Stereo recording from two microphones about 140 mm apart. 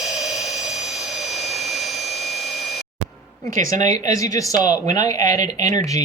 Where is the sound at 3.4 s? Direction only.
25° left (ahead or behind).